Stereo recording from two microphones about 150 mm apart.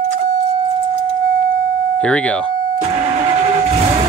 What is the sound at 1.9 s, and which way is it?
Speech, 10° left (ahead or behind).